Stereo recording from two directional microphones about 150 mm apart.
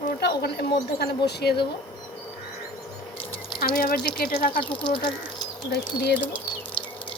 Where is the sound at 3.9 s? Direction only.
90° left.